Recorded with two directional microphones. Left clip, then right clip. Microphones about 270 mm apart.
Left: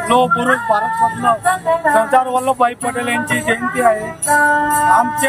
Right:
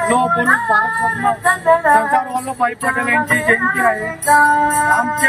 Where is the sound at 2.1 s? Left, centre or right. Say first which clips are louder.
Left 4 dB; centre.